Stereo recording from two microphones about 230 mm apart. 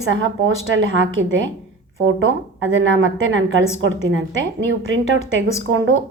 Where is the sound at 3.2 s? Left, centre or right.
Right.